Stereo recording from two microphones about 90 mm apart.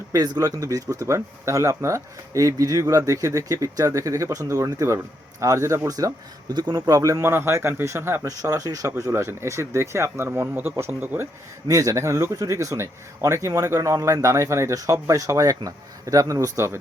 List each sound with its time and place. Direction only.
0.1 s speech: 45° right (ahead or behind)
6.7 s speech: 40° right (ahead or behind)